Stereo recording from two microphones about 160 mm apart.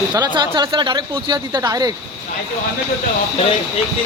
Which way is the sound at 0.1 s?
25° right (ahead or behind).